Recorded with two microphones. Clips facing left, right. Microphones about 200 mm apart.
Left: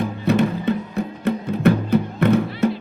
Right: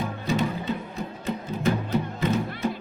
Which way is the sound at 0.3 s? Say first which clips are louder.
Left 8 dB; 60° left (ahead or behind).